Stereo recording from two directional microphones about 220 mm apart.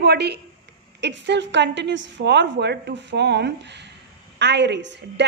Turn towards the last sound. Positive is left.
turn(degrees=-50)  # may be behind; listen again after turning